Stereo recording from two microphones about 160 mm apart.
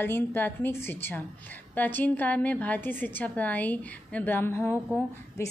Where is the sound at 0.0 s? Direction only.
15° left (ahead or behind).